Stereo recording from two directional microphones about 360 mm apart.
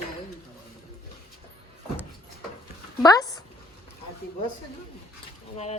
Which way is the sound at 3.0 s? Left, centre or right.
Centre.